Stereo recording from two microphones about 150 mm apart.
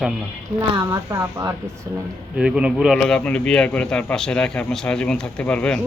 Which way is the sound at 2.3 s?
5° right (ahead or behind).